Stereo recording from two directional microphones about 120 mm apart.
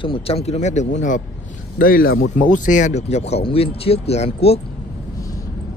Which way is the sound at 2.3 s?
90° left.